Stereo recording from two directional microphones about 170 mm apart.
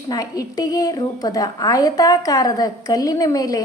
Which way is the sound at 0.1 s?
20° left (ahead or behind).